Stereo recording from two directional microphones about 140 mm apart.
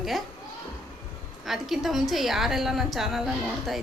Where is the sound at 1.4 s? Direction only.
Centre (ahead or behind).